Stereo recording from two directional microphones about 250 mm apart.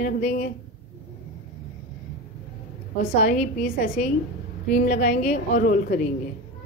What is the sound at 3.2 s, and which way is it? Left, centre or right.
A woman's voice, left.